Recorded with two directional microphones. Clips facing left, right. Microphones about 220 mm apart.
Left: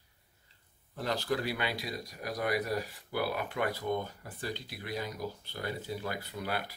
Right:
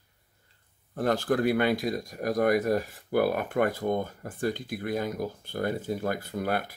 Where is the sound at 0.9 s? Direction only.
50° right (ahead or behind).